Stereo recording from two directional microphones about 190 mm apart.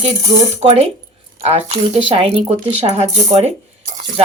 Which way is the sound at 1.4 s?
35° right (ahead or behind).